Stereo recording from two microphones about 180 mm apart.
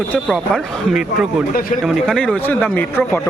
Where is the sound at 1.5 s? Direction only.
50° left (ahead or behind).